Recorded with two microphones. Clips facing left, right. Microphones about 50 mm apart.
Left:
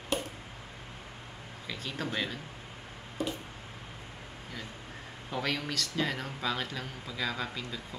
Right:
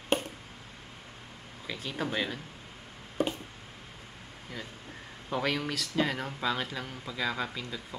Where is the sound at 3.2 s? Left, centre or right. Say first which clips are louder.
Right 4 dB; right.